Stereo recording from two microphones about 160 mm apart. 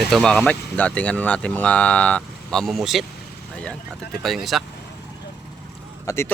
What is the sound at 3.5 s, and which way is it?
Vehicle, 5° left (ahead or behind).